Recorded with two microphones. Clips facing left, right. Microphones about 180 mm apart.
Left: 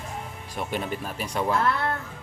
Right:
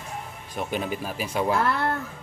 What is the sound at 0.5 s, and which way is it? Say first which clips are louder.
Speech: right 1 dB; centre (ahead or behind).